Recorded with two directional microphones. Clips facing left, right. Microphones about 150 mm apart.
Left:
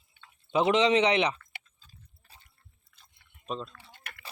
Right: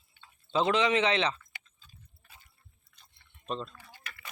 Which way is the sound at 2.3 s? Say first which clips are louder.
Even; 35° left (ahead or behind).